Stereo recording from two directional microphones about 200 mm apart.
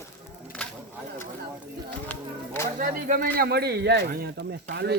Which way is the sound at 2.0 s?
10° left (ahead or behind).